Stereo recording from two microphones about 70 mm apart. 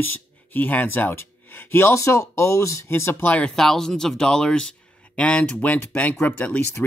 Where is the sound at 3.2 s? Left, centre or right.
Centre.